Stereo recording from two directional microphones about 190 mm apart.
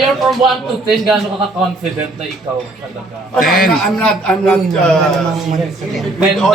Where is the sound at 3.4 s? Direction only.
50° left (ahead or behind).